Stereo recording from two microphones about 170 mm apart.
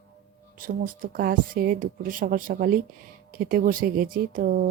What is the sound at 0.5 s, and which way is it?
Speech, 55° right (ahead or behind).